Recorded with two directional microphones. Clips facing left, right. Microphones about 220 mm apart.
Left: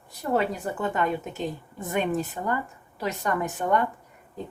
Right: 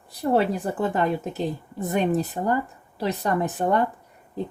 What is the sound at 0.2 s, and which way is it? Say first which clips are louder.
Speech: right 4 dB; 35° right (ahead or behind).